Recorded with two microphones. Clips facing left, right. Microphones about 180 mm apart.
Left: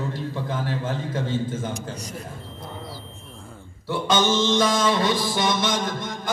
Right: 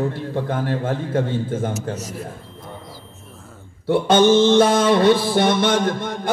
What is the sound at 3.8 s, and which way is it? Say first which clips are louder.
A man's voice: right 8 dB; 60° right (ahead or behind).